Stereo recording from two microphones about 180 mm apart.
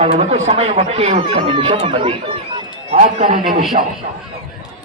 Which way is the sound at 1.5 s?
25° right (ahead or behind).